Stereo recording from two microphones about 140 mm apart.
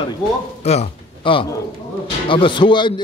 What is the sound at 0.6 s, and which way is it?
A man's voice, 50° left (ahead or behind).